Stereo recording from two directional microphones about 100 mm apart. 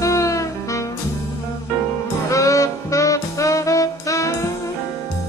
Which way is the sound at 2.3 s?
30° left (ahead or behind).